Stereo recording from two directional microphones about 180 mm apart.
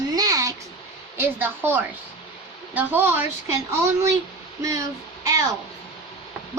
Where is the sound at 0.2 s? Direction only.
20° right (ahead or behind).